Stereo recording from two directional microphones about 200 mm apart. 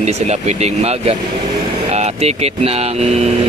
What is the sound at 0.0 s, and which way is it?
Speech, 35° right (ahead or behind).